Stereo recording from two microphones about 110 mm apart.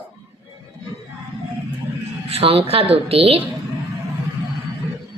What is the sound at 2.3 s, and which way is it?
A woman's voice, 60° right (ahead or behind).